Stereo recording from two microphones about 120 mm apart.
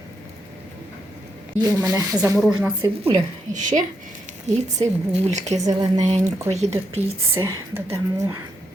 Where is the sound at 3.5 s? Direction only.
90° right.